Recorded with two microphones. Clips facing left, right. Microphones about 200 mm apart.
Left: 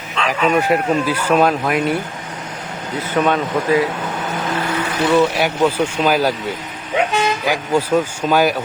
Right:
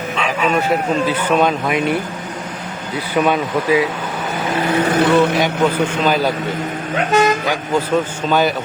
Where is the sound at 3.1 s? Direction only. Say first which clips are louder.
Right 1 dB; 5° right (ahead or behind).